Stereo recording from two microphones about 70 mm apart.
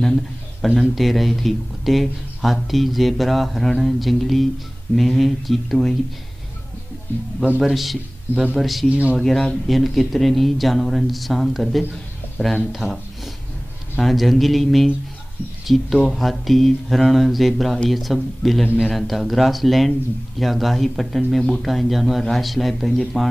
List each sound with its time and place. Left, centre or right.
0.0 s speech: centre
7.6 s a man's voice: centre
8.8 s speech: centre
9.1 s speech: centre
11.9 s a sound: centre
12.7 s speech: centre